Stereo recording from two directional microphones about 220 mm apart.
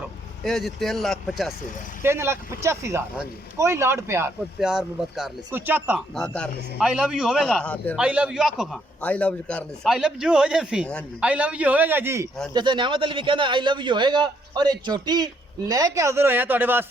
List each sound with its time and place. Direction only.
0.4 s a man's voice: centre (ahead or behind)
2.0 s speech: 10° right (ahead or behind)
6.2 s a man's voice: 5° left (ahead or behind)
8.0 s a man's voice: 5° right (ahead or behind)